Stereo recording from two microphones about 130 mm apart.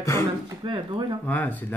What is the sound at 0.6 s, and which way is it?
Speech, 35° right (ahead or behind).